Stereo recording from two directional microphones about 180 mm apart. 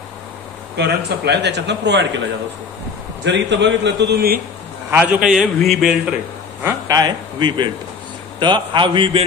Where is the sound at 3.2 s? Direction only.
75° right (ahead or behind).